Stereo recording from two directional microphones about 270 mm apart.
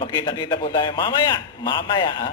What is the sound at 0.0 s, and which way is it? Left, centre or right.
A man's voice, centre.